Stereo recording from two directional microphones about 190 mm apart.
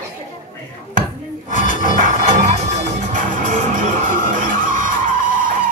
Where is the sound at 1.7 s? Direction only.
45° right (ahead or behind).